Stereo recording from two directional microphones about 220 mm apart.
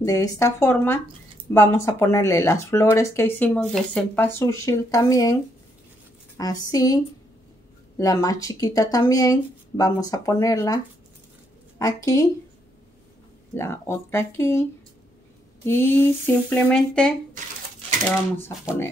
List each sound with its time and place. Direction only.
0.0 s speech: 15° left (ahead or behind)
8.0 s speech: 15° left (ahead or behind)
11.8 s speech: 15° left (ahead or behind)
13.6 s speech: 10° left (ahead or behind)
15.6 s speech: 10° left (ahead or behind)